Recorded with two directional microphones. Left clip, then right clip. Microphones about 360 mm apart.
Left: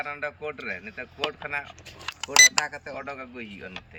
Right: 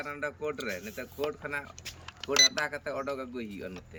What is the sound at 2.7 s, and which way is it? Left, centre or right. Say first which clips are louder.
Speech: right 1 dB; centre.